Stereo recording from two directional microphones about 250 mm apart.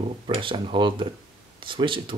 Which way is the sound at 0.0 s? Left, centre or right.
Right.